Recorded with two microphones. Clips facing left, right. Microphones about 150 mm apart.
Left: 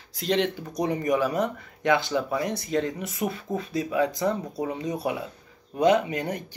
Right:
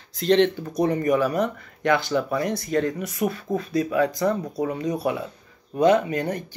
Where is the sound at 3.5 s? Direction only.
20° right (ahead or behind).